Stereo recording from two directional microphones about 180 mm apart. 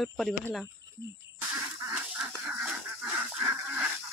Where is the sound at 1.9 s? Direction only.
5° right (ahead or behind).